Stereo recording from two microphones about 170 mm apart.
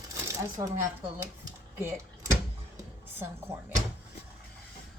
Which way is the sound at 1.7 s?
15° right (ahead or behind).